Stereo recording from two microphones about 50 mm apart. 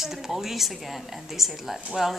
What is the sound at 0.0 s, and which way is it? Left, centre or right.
A woman's voice, centre.